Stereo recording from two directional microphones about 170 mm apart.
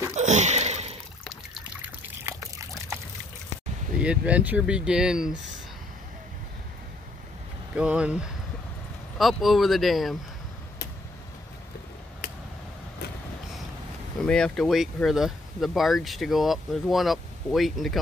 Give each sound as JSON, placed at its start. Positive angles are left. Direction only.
{"t": 0.1, "sound": "a sound", "side_deg": -45}
{"t": 1.2, "sound": "trickle", "side_deg": 0}
{"t": 4.0, "sound": "speech", "side_deg": -5}
{"t": 7.7, "sound": "speech", "side_deg": -5}
{"t": 14.2, "sound": "speech", "side_deg": 5}